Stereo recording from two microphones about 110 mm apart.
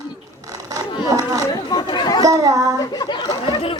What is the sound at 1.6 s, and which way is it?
Speech, 45° left (ahead or behind).